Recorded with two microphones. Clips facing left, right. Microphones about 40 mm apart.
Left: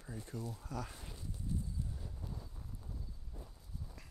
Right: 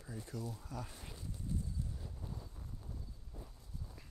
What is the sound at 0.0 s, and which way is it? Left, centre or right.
Speech, left.